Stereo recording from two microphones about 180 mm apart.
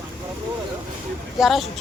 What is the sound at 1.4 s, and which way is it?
Speech, centre (ahead or behind).